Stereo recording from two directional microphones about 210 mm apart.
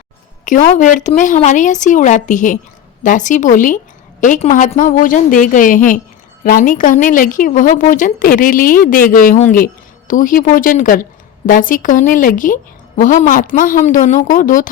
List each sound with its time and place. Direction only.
0.4 s a woman's voice: 40° left (ahead or behind)